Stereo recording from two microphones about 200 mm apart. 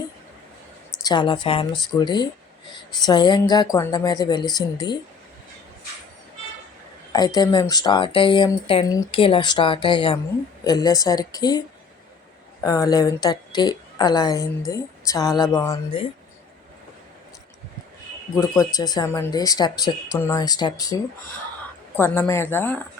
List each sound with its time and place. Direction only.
1.0 s speech: 20° left (ahead or behind)
7.3 s speech: 20° left (ahead or behind)
12.6 s a woman's voice: 20° left (ahead or behind)
18.3 s a woman's voice: 15° left (ahead or behind)